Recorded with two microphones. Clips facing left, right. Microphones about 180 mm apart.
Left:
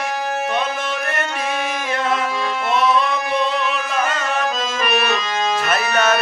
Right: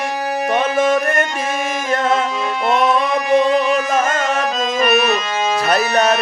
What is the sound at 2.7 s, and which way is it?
Music, 50° right (ahead or behind).